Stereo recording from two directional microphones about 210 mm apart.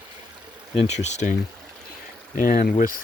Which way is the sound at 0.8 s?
35° left (ahead or behind).